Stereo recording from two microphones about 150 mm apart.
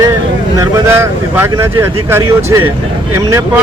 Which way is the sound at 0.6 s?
15° right (ahead or behind).